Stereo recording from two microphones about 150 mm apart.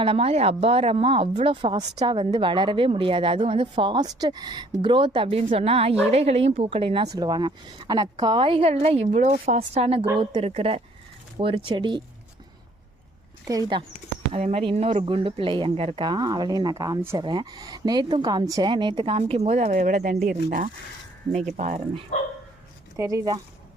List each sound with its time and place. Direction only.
0.0 s a woman's voice: 40° right (ahead or behind)
7.2 s a woman's voice: 25° right (ahead or behind)
13.5 s speech: 30° right (ahead or behind)
14.3 s a woman's voice: 45° right (ahead or behind)
16.0 s a woman's voice: 25° right (ahead or behind); by 19.7 s 45° right (ahead or behind)
19.7 s speech: 60° right (ahead or behind)
21.3 s a woman's voice: 50° right (ahead or behind)
23.0 s speech: 20° right (ahead or behind)